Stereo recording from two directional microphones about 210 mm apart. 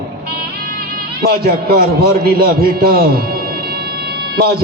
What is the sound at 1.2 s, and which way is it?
A man's voice, 45° right (ahead or behind).